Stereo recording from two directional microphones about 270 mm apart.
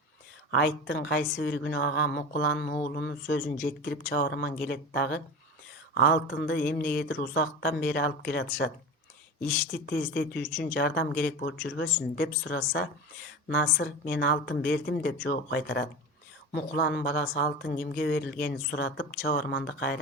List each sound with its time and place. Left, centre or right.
0.5 s speech: left